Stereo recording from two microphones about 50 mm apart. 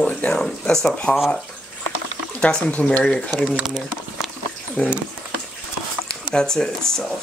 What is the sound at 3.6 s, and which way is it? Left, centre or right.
Speech, centre.